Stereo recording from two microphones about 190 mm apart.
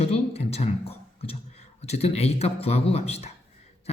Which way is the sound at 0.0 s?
35° left (ahead or behind).